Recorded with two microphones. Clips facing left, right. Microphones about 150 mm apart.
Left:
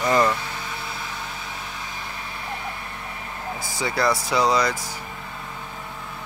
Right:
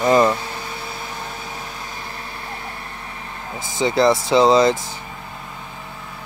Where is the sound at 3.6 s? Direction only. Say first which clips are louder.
Right 7 dB; 20° right (ahead or behind).